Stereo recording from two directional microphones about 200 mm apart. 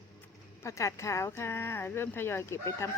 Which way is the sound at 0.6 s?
15° left (ahead or behind).